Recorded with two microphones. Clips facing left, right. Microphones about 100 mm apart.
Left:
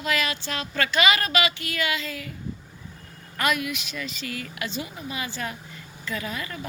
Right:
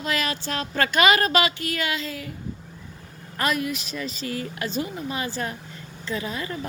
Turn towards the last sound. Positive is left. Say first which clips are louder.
# right 3 dB
turn(degrees=-30)  # may be behind; listen again after turning